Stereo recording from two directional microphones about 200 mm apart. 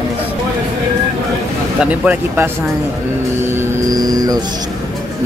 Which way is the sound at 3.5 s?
20° right (ahead or behind).